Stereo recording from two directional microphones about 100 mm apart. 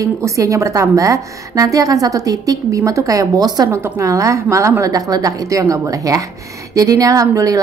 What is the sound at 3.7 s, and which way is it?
A woman's voice, 30° right (ahead or behind).